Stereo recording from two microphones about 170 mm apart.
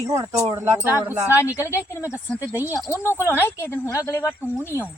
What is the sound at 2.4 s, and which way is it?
Speech, 10° right (ahead or behind).